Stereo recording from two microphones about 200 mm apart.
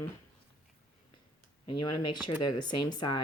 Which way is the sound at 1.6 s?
25° left (ahead or behind).